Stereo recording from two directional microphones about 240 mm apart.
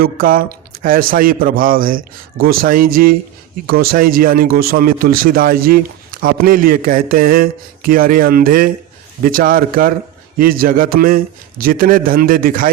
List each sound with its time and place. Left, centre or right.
0.0 s speech: right